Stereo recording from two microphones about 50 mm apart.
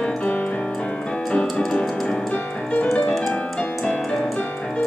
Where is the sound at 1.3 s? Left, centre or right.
Left.